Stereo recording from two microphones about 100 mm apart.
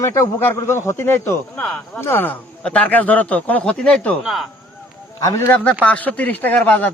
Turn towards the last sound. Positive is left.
turn(degrees=15)  # may be behind; listen again after turning